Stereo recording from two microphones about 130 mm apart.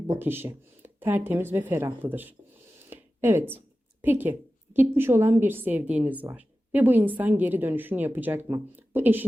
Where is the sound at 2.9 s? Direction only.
15° right (ahead or behind).